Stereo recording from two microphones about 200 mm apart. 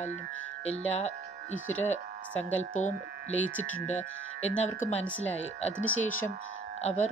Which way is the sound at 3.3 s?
10° left (ahead or behind).